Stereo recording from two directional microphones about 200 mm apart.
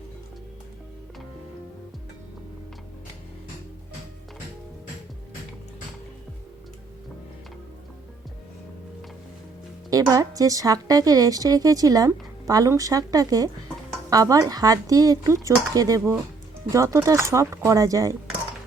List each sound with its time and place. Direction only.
9.9 s a woman's voice: 15° right (ahead or behind)